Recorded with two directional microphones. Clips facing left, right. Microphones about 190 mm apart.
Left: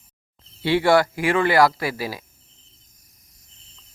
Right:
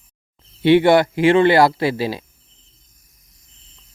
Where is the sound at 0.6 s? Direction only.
20° right (ahead or behind).